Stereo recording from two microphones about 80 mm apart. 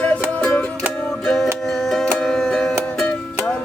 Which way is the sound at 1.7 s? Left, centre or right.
Centre.